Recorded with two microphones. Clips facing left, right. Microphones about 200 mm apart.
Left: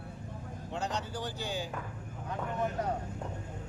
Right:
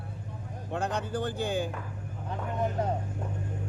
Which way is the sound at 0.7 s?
55° right (ahead or behind).